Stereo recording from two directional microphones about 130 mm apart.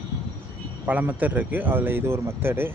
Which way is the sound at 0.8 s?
10° right (ahead or behind).